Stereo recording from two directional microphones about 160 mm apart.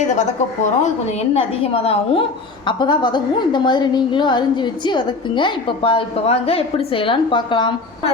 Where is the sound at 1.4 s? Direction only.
35° left (ahead or behind).